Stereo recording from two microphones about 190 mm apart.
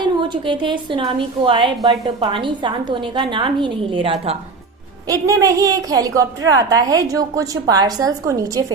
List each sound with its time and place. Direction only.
0.0 s a woman's voice: 25° right (ahead or behind)
5.0 s a woman's voice: 15° right (ahead or behind)